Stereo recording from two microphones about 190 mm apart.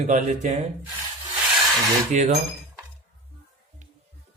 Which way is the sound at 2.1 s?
40° right (ahead or behind).